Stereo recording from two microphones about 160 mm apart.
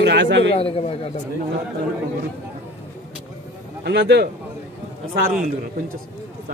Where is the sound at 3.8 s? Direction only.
90° right.